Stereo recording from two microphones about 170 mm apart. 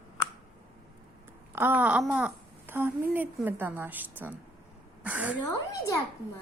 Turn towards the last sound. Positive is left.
turn(degrees=20)  # may be behind; listen again after turning